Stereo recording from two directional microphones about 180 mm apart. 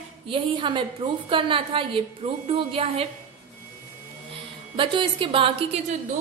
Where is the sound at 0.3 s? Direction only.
30° right (ahead or behind).